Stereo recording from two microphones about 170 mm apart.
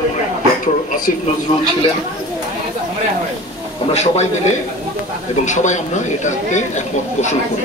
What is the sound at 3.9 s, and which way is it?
Speech, 40° left (ahead or behind).